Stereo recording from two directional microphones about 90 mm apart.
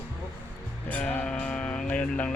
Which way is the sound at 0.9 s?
15° left (ahead or behind).